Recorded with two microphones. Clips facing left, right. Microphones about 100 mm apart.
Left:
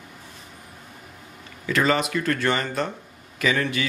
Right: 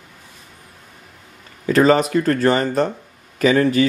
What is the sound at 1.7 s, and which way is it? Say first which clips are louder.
Speech: right 8 dB; 40° right (ahead or behind).